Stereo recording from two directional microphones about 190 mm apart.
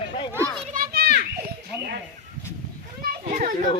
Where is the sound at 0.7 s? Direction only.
50° right (ahead or behind).